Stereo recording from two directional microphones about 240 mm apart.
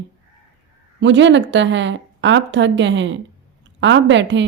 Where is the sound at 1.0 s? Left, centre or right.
Right.